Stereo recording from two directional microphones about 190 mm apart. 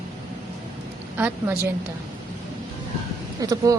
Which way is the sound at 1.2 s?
10° right (ahead or behind).